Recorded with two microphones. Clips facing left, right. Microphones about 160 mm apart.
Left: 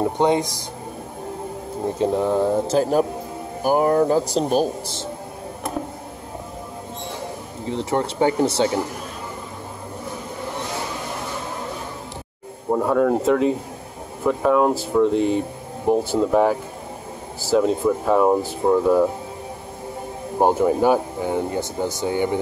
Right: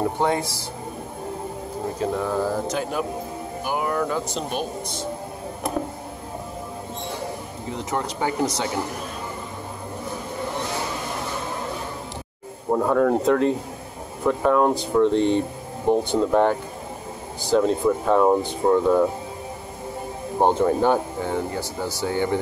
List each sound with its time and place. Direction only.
0.2 s speech: 15° left (ahead or behind)
2.0 s speech: 25° left (ahead or behind)
2.7 s speech: 40° left (ahead or behind)
7.7 s speech: 30° left (ahead or behind)
12.7 s speech: 5° left (ahead or behind)
20.3 s speech: 10° left (ahead or behind)